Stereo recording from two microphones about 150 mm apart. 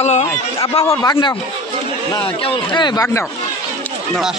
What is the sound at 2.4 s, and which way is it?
Speech, 35° left (ahead or behind).